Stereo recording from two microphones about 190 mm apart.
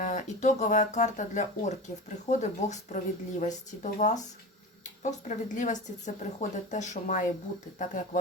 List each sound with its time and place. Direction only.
0.0 s speech: 40° left (ahead or behind)